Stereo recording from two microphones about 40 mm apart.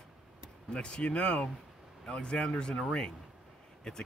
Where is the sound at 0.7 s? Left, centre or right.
Left.